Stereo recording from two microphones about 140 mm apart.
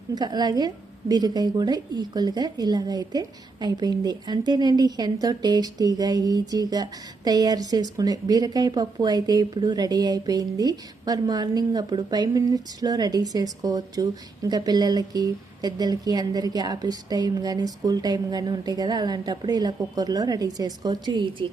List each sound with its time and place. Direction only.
0.1 s a woman's voice: 30° right (ahead or behind)